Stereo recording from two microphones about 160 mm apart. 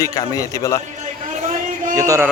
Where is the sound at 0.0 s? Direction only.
20° left (ahead or behind).